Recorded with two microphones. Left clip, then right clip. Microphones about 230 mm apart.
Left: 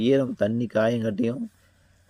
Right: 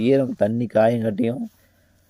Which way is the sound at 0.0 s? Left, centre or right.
Centre.